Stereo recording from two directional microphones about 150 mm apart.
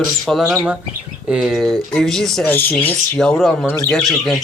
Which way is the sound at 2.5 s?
15° left (ahead or behind).